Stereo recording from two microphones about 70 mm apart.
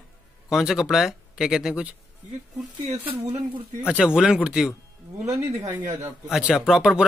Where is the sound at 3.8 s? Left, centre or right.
Centre.